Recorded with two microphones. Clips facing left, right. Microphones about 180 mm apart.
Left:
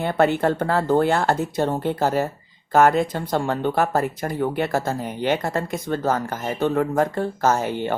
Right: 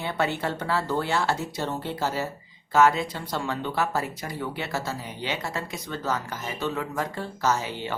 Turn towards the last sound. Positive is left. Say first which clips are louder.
# left 6 dB
turn(degrees=55)  # may be behind; listen again after turning